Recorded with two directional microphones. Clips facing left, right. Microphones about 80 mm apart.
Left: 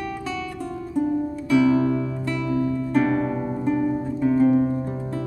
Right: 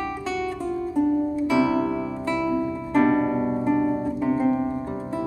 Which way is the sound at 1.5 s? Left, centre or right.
Right.